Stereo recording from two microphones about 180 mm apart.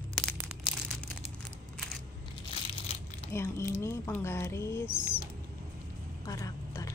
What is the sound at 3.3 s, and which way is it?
Speech, 15° left (ahead or behind).